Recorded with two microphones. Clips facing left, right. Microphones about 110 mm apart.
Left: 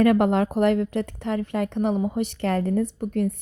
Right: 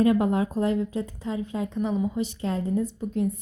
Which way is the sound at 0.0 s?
80° left.